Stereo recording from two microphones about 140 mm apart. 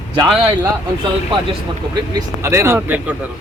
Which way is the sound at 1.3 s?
40° right (ahead or behind).